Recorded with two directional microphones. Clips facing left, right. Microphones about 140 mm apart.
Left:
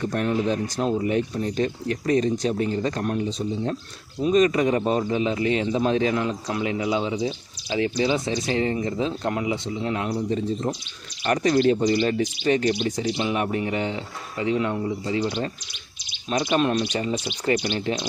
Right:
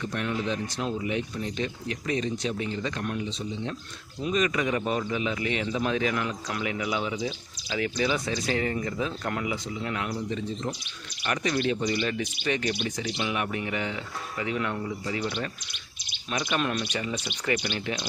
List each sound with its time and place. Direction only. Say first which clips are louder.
0.0 s speech: left 6 dB; 40° left (ahead or behind)
16.5 s speech: left 7 dB; 30° left (ahead or behind)